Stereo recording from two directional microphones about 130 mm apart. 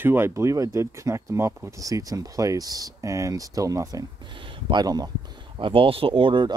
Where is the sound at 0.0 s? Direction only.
15° right (ahead or behind).